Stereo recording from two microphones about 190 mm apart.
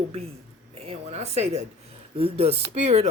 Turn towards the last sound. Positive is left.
turn(degrees=-35)  # may be behind; listen again after turning